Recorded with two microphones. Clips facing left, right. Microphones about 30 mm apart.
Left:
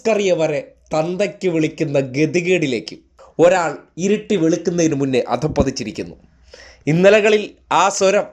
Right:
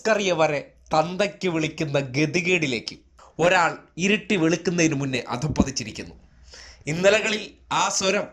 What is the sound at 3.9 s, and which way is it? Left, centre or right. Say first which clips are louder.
Speech: left 6 dB; right.